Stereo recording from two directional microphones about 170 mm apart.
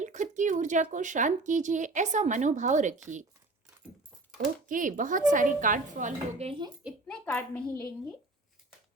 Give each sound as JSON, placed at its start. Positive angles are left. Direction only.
{"t": 0.0, "sound": "speech", "side_deg": -45}
{"t": 4.4, "sound": "speech", "side_deg": -50}
{"t": 6.8, "sound": "a child's voice", "side_deg": 5}